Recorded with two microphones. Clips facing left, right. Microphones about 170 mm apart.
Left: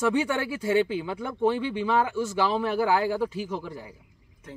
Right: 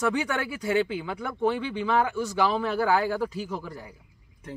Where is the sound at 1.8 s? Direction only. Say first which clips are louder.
Right 1 dB; 5° left (ahead or behind).